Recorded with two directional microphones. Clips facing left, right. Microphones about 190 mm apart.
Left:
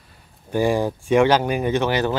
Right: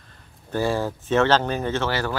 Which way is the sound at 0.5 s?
15° left (ahead or behind).